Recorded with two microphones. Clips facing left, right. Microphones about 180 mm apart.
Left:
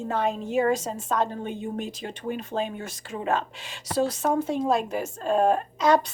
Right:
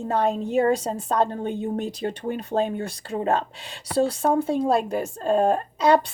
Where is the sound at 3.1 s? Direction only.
35° right (ahead or behind).